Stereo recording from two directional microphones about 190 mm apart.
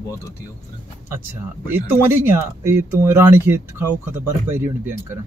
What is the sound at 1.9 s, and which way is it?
Speech, 15° right (ahead or behind).